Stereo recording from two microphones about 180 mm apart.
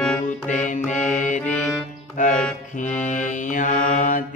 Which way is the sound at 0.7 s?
45° left (ahead or behind).